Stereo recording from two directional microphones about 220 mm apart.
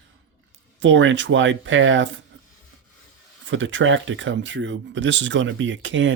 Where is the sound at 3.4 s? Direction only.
60° right (ahead or behind).